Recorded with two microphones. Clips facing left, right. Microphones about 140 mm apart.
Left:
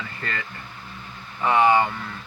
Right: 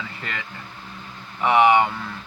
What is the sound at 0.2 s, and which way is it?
Speech, 15° right (ahead or behind).